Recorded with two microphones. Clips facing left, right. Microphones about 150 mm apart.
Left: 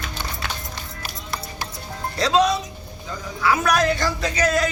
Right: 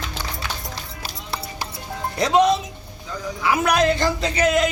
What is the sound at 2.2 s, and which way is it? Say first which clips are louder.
Speech: right 2 dB; 20° right (ahead or behind).